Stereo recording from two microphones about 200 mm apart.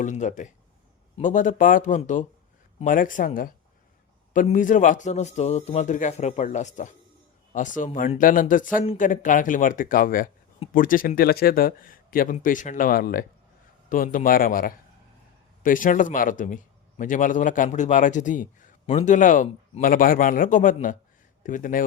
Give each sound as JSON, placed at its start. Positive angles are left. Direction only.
{"t": 0.0, "sound": "a man's voice", "side_deg": 40}
{"t": 8.8, "sound": "speech", "side_deg": 30}
{"t": 9.0, "sound": "a man's voice", "side_deg": 40}